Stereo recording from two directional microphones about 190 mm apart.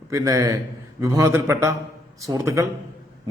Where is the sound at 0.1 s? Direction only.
15° right (ahead or behind).